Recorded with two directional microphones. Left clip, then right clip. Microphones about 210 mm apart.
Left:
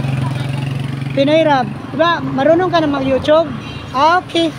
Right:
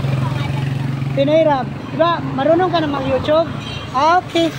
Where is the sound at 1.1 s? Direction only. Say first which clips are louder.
Left 2 dB; 35° left (ahead or behind).